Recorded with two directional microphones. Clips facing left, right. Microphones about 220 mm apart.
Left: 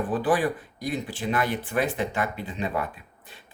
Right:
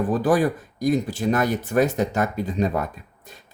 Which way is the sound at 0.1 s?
40° right (ahead or behind).